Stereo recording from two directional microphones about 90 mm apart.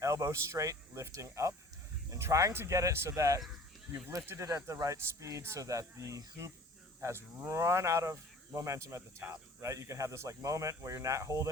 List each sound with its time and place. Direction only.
0.0 s speech: 35° right (ahead or behind)